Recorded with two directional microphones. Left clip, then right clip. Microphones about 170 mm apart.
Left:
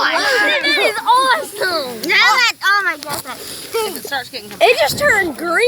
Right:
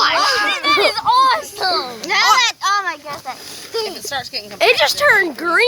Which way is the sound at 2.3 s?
35° right (ahead or behind).